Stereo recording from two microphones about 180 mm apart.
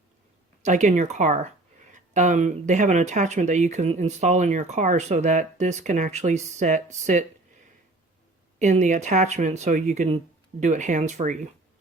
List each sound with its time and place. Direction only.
0.6 s speech: 40° right (ahead or behind)
8.5 s speech: 40° right (ahead or behind)